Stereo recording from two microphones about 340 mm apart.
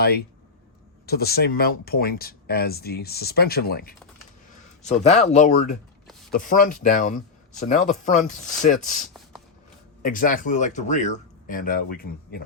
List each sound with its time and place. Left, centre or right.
1.0 s speech: left